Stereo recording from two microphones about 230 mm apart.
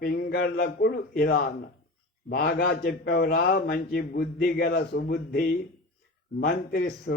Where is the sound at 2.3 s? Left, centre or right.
Left.